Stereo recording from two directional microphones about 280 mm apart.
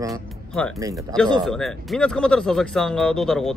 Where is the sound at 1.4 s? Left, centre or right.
Centre.